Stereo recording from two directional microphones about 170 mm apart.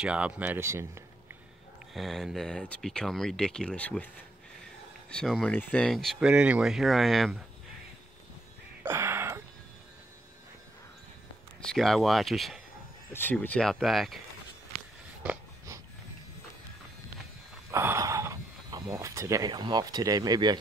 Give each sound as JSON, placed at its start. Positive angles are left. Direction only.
{"t": 0.0, "sound": "speech", "side_deg": -5}
{"t": 2.0, "sound": "speech", "side_deg": 0}
{"t": 5.1, "sound": "speech", "side_deg": 5}
{"t": 8.8, "sound": "a sound", "side_deg": -15}
{"t": 11.6, "sound": "speech", "side_deg": 0}
{"t": 13.1, "sound": "speech", "side_deg": 10}
{"t": 17.6, "sound": "speech", "side_deg": -15}